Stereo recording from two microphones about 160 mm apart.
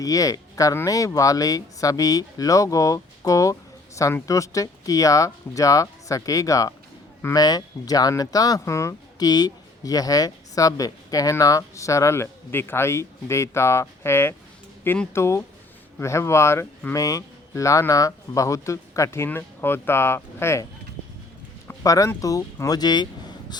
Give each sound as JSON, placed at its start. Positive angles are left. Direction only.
{"t": 0.0, "sound": "speech", "side_deg": 20}
{"t": 21.8, "sound": "speech", "side_deg": 20}